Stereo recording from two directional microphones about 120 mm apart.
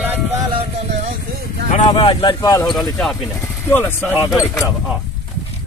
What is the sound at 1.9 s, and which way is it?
Speech, 40° left (ahead or behind).